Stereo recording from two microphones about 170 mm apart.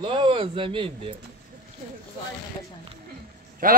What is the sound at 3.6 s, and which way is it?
Speech, 55° right (ahead or behind).